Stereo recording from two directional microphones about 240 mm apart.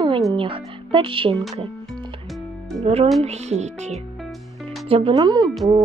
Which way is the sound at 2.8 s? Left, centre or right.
Right.